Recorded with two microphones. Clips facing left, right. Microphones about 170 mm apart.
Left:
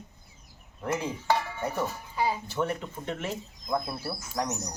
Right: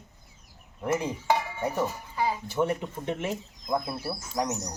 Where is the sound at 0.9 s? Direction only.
15° right (ahead or behind).